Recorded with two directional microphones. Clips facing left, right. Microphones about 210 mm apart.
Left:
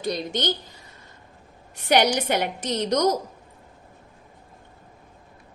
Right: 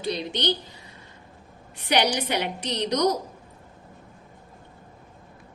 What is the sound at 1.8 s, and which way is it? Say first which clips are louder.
A woman's voice: left 3 dB; 45° left (ahead or behind).